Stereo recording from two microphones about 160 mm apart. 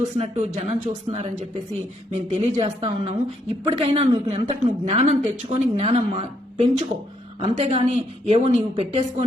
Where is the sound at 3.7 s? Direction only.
35° right (ahead or behind).